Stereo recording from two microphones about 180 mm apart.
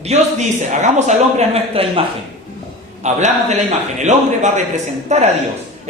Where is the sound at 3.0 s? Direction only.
40° right (ahead or behind).